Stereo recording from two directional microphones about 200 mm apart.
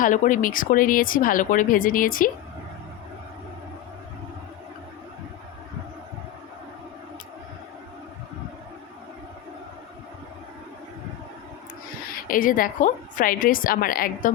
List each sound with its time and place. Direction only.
0.0 s speech: 40° left (ahead or behind)
12.3 s speech: 45° left (ahead or behind)